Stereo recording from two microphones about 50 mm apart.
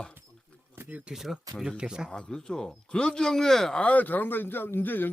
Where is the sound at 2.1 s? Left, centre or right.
Centre.